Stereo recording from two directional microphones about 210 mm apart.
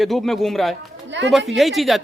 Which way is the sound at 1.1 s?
60° right (ahead or behind).